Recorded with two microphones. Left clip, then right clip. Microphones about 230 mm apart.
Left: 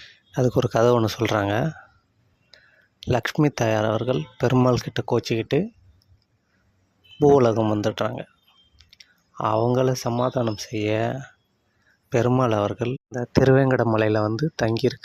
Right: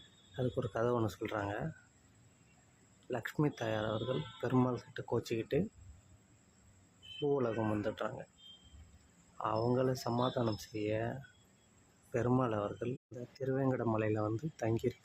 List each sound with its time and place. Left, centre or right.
0.3 s speech: left
3.1 s speech: left
7.3 s speech: left
9.4 s speech: left